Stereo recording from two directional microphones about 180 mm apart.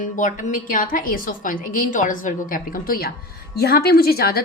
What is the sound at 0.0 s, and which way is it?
A woman's voice, 45° left (ahead or behind).